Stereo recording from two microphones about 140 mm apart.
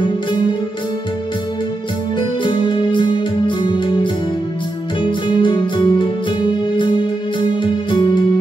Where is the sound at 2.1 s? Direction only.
35° left (ahead or behind).